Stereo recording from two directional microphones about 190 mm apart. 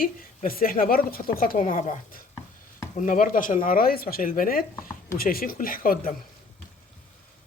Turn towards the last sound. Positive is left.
turn(degrees=50)  # may be behind; listen again after turning